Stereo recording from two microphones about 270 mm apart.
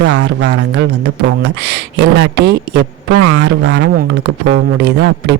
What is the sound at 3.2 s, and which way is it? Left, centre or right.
Speech, right.